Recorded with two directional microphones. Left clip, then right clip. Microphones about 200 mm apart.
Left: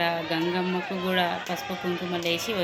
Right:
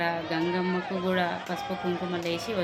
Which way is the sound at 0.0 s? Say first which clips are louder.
Left 2 dB; centre (ahead or behind).